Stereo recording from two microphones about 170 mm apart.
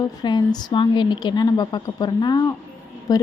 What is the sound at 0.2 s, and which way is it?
A woman's voice, 25° left (ahead or behind).